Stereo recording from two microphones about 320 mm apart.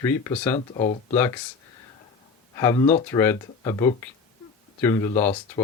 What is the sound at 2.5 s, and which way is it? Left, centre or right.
Speech, centre.